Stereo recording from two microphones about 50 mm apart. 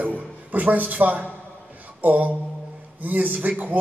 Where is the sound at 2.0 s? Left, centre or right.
Right.